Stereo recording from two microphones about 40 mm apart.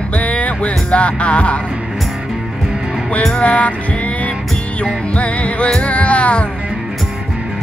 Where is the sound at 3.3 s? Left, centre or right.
Left.